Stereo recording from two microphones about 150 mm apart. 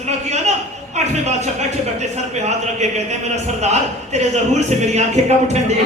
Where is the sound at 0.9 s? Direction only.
50° right (ahead or behind).